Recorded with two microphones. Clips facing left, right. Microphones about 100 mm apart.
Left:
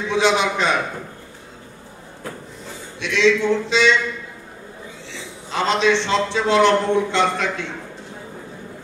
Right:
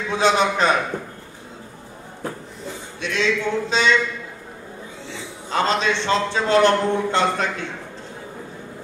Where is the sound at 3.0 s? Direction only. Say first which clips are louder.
Left 3 dB; 45° right (ahead or behind).